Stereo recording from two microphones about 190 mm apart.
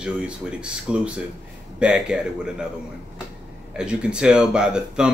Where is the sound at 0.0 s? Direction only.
5° right (ahead or behind).